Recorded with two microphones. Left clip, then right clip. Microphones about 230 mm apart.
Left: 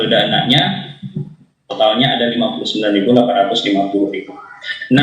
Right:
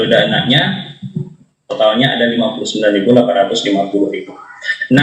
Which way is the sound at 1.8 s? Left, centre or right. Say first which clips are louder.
Right 1 dB; right.